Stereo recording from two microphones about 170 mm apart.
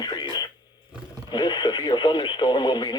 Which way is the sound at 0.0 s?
25° left (ahead or behind).